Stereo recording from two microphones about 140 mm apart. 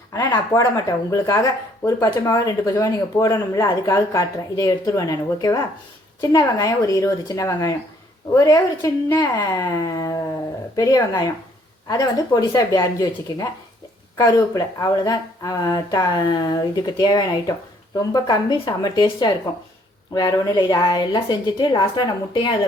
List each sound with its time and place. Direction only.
0.1 s speech: 25° left (ahead or behind)
9.2 s a woman's voice: 30° left (ahead or behind)